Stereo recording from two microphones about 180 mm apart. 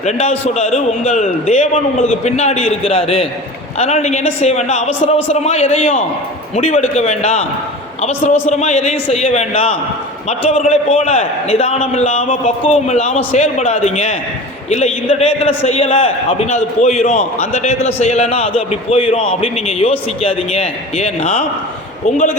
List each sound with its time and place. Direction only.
0.0 s a man's voice: 35° left (ahead or behind)